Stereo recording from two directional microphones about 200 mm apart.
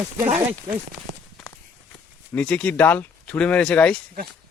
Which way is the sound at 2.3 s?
5° left (ahead or behind).